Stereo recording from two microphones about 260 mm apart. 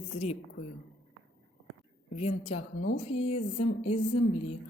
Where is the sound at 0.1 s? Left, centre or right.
Left.